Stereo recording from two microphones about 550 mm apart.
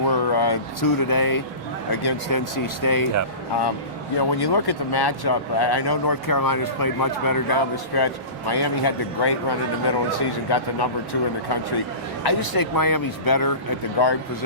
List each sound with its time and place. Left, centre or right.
0.1 s a sound: left
1.9 s speech: left
4.2 s speech: left